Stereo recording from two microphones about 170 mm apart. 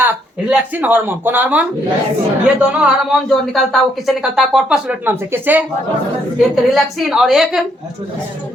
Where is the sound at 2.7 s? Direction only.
5° right (ahead or behind).